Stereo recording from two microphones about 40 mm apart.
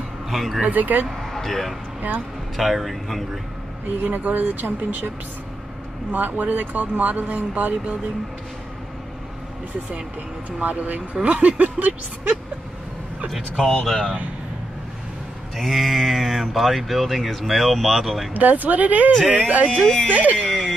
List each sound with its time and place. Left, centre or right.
0.3 s speech: centre
0.7 s speech: right
1.3 s speech: centre
4.0 s speech: right
6.1 s speech: right
10.6 s a sound: right
13.6 s speech: centre
15.5 s speech: centre
18.3 s a sound: right
20.1 s speech: right
20.4 s speech: centre